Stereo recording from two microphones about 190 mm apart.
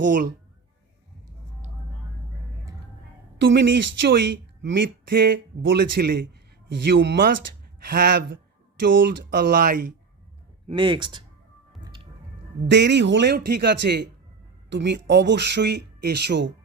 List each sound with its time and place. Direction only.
0.0 s a man's voice: 45° right (ahead or behind)
3.4 s a woman's voice: 70° right (ahead or behind)
5.0 s a man's voice: 50° right (ahead or behind)
6.8 s speech: 65° right (ahead or behind)
7.8 s a man's voice: 55° right (ahead or behind)
10.7 s speech: 25° right (ahead or behind)
11.8 s music: 25° right (ahead or behind)
12.6 s speech: 65° right (ahead or behind)